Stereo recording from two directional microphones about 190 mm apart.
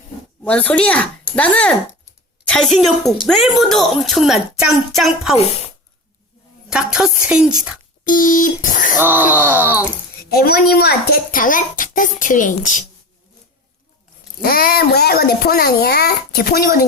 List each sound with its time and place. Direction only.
0.4 s a child's voice: 5° left (ahead or behind)
6.7 s a child's voice: 5° right (ahead or behind)
8.0 s a woman's voice: 45° left (ahead or behind)
9.0 s speech: 10° right (ahead or behind)
10.3 s a woman's voice: 55° left (ahead or behind)
14.4 s a woman's voice: 50° left (ahead or behind)